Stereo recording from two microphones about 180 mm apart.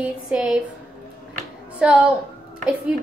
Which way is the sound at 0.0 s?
5° right (ahead or behind).